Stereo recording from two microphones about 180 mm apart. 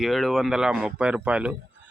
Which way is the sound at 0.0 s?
Centre (ahead or behind).